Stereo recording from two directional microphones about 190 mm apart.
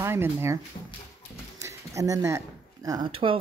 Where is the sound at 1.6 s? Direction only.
15° right (ahead or behind).